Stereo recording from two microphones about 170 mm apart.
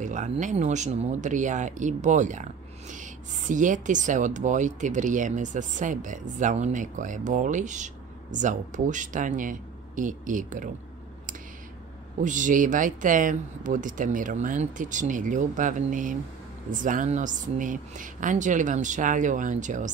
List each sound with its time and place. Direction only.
0.0 s speech: 45° right (ahead or behind)
12.2 s speech: 50° right (ahead or behind)